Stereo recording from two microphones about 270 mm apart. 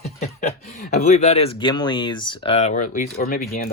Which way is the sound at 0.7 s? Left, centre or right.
Left.